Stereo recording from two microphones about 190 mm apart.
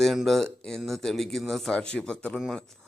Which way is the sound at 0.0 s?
Centre (ahead or behind).